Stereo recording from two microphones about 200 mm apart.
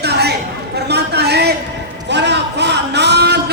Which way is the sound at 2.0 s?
60° right (ahead or behind).